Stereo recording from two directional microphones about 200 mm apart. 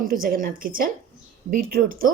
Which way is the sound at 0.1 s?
45° right (ahead or behind).